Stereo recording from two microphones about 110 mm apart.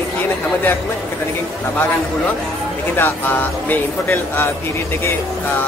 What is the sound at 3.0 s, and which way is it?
Speech, 20° left (ahead or behind).